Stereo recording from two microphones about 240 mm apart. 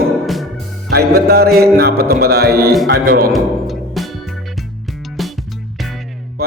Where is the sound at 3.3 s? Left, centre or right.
Centre.